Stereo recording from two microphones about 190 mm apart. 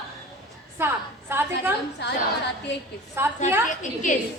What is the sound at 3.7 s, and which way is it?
Speech, 40° left (ahead or behind).